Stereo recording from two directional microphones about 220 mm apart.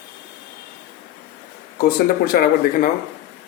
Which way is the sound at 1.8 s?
45° left (ahead or behind).